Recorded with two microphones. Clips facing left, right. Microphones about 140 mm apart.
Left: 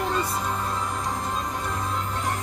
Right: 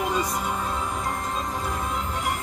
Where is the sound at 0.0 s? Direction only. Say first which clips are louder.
Right 1 dB; 10° right (ahead or behind).